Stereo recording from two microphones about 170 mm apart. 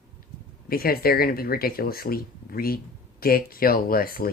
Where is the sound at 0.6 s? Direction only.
60° left (ahead or behind).